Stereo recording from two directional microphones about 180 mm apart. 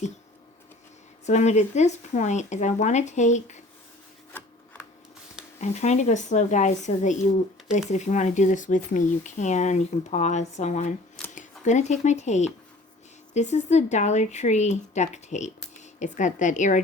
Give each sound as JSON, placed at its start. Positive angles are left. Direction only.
{"t": 1.2, "sound": "speech", "side_deg": 40}
{"t": 4.4, "sound": "filing", "side_deg": 10}
{"t": 5.5, "sound": "a woman's voice", "side_deg": 40}